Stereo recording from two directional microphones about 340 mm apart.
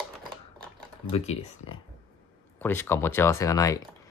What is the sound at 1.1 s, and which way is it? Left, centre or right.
Speech, centre.